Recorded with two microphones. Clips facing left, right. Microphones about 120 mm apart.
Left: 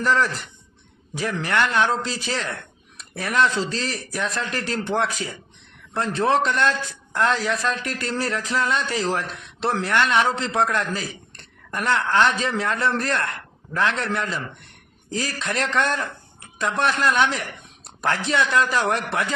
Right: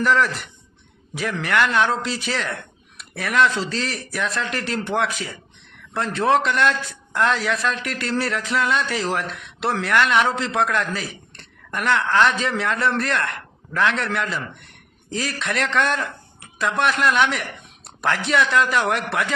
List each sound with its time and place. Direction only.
0.0 s a man's voice: 35° left (ahead or behind)